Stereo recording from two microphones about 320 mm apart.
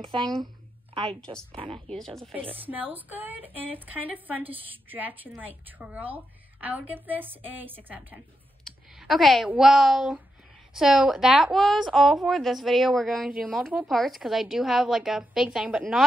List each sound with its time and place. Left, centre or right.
0.0 s speech: centre
1.9 s a woman's voice: centre